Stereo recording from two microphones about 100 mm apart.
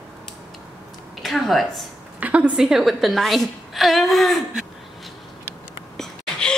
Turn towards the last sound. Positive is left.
turn(degrees=10)  # may be behind; listen again after turning